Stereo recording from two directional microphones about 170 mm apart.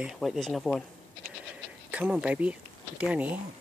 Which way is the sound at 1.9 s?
5° right (ahead or behind).